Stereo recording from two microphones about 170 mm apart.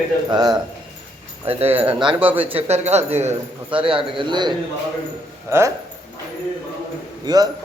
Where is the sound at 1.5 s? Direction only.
35° right (ahead or behind).